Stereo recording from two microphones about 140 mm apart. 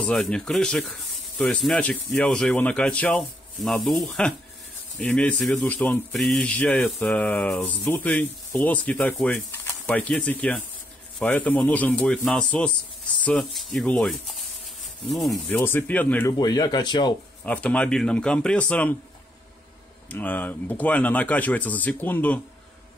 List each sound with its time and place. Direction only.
0.0 s speech: 5° left (ahead or behind)
15.5 s speech: 15° left (ahead or behind)
16.3 s speech: 30° left (ahead or behind)
17.4 s speech: 10° left (ahead or behind)
20.1 s speech: 10° left (ahead or behind)